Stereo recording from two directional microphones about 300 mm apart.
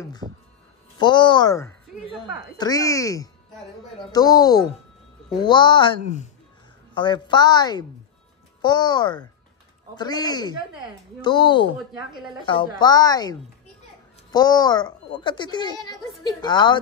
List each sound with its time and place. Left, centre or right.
0.2 s speech: centre
0.9 s a child's voice: centre